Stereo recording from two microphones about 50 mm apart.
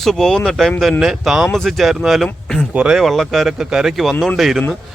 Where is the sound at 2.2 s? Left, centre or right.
Centre.